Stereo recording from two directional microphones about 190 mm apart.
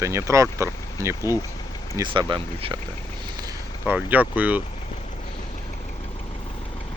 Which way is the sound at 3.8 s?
10° right (ahead or behind).